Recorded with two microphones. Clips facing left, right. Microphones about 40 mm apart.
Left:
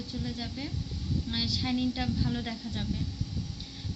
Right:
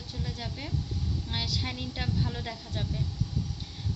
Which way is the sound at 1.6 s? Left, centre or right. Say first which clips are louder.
Left 6 dB; right.